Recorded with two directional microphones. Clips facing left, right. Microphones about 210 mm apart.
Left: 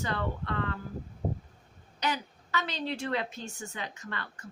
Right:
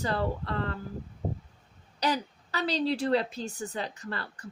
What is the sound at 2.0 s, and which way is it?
A woman's voice, 35° right (ahead or behind).